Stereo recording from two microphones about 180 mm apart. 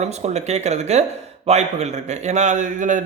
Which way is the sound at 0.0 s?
40° right (ahead or behind).